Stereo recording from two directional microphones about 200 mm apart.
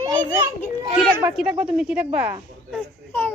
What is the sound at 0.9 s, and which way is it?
A woman's voice, centre (ahead or behind).